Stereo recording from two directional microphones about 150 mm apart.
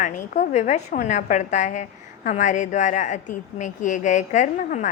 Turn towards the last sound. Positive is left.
turn(degrees=55)  # may be behind; listen again after turning